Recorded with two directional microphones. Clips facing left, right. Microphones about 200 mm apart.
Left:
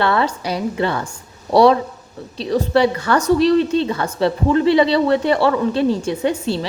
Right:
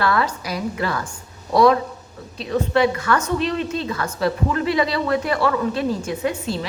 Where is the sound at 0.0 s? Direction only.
25° left (ahead or behind).